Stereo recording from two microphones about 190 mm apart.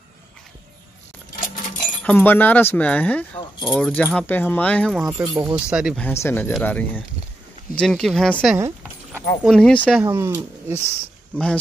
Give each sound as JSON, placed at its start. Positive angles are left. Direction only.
{"t": 1.3, "sound": "coin", "side_deg": 45}
{"t": 2.0, "sound": "speech", "side_deg": 10}
{"t": 5.2, "sound": "speech", "side_deg": -15}
{"t": 5.7, "sound": "speech", "side_deg": -5}
{"t": 5.9, "sound": "speech", "side_deg": 10}
{"t": 8.5, "sound": "a sound", "side_deg": -15}
{"t": 9.4, "sound": "speech", "side_deg": 5}
{"t": 10.0, "sound": "speech", "side_deg": -15}